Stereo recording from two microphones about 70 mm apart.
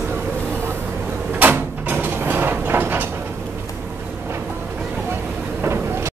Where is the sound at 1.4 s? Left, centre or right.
Right.